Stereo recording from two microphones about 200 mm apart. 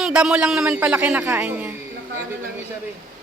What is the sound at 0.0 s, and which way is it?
Speech, 5° right (ahead or behind).